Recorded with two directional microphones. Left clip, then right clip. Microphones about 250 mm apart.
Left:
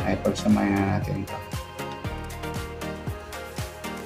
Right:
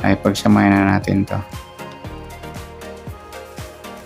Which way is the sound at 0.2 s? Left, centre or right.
Right.